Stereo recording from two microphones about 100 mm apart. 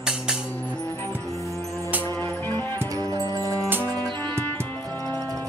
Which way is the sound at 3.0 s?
40° right (ahead or behind).